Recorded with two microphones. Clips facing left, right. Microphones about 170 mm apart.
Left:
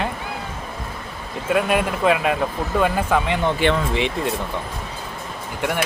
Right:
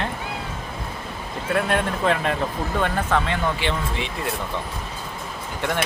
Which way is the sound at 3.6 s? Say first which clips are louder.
Left 7 dB; 50° left (ahead or behind).